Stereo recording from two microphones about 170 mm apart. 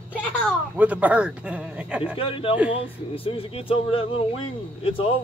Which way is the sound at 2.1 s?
35° left (ahead or behind).